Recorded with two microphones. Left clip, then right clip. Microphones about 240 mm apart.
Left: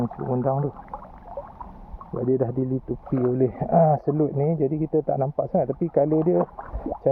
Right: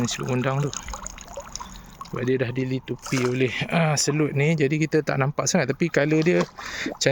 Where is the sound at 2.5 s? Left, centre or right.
Centre.